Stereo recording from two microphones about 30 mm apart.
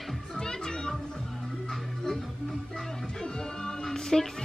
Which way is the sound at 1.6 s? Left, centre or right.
Centre.